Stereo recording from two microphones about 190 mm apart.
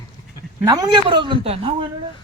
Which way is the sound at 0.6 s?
20° right (ahead or behind).